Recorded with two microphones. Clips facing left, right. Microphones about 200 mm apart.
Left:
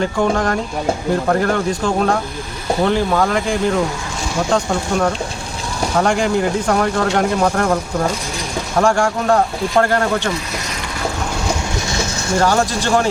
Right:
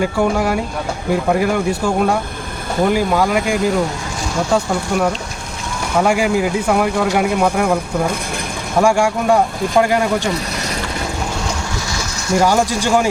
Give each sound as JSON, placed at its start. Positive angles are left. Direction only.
{"t": 0.0, "sound": "speech", "side_deg": -10}
{"t": 11.9, "sound": "a sound", "side_deg": 25}
{"t": 12.4, "sound": "speech", "side_deg": -10}